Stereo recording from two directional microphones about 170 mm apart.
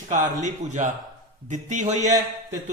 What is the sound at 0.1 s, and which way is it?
A man's voice, 45° right (ahead or behind).